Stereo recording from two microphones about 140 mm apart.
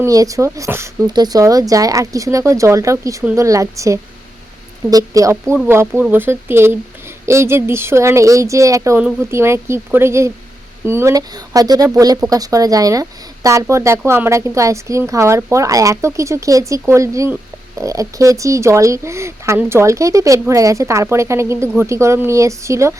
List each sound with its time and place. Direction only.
0.0 s speech: 25° right (ahead or behind)